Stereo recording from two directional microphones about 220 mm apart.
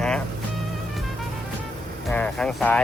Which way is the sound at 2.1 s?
5° left (ahead or behind).